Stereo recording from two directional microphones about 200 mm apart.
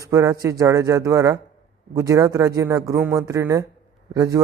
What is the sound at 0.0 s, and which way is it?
A man's voice, 15° right (ahead or behind).